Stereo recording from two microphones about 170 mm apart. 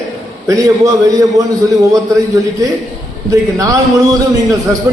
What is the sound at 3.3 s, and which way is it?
A man's voice, 20° right (ahead or behind).